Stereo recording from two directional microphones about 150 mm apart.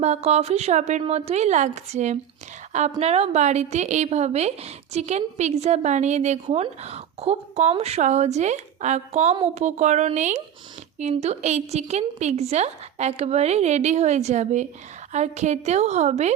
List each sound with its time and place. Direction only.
0.0 s a woman's voice: 45° right (ahead or behind)